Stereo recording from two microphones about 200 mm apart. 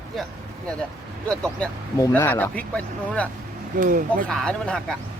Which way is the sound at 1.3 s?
5° left (ahead or behind).